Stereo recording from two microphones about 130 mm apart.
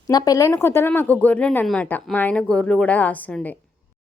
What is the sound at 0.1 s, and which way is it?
Speech, 30° left (ahead or behind).